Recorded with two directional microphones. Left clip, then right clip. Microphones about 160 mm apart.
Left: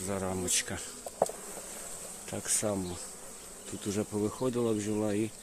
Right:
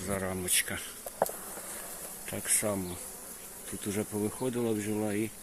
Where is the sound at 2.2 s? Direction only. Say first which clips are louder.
Even; 15° left (ahead or behind).